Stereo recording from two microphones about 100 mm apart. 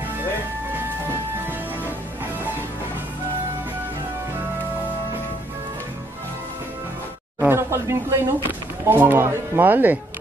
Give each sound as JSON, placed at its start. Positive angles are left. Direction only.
{"t": 7.3, "sound": "speech", "side_deg": -25}